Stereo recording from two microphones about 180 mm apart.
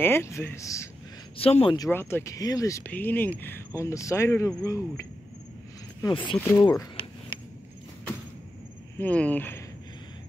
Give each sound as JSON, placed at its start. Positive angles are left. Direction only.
{"t": 0.0, "sound": "speech", "side_deg": 15}
{"t": 1.4, "sound": "speech", "side_deg": 30}
{"t": 1.8, "sound": "speech", "side_deg": 15}
{"t": 6.4, "sound": "speech", "side_deg": 10}
{"t": 8.9, "sound": "speech", "side_deg": 10}